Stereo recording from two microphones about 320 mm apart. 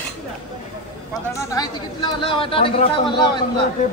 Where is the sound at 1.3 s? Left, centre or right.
Centre.